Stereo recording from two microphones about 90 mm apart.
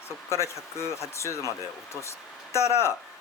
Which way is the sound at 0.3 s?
30° left (ahead or behind).